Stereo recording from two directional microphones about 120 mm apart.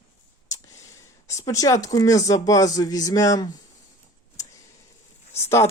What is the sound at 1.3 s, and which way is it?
Speech, 25° left (ahead or behind).